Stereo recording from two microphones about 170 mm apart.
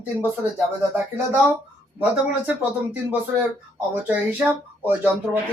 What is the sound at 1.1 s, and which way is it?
Speech, 10° right (ahead or behind).